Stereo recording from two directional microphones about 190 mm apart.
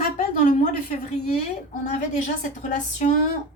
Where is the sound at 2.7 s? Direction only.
40° left (ahead or behind).